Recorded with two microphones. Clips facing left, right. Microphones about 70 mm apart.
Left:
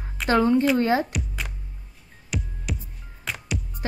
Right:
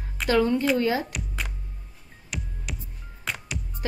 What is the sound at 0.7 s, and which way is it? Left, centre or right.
Speech, left.